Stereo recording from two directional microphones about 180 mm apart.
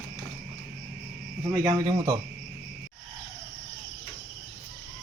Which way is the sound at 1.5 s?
20° right (ahead or behind).